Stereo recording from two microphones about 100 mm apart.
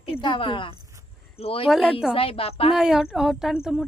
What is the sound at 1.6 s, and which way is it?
Speech, 5° right (ahead or behind).